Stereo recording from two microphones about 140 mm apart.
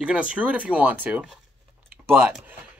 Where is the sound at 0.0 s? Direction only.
10° right (ahead or behind).